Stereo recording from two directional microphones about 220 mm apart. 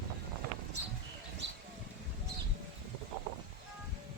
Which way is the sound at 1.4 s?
55° right (ahead or behind).